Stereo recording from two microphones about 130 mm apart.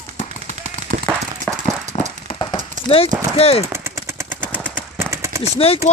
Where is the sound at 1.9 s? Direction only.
55° left (ahead or behind).